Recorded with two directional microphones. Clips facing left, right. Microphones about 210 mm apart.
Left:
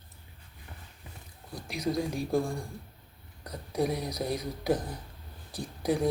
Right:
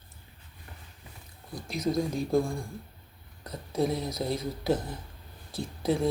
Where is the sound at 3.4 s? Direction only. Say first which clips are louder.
Right 1 dB; 15° left (ahead or behind).